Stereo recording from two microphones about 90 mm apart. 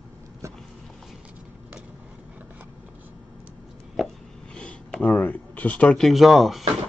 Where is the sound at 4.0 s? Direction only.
Centre (ahead or behind).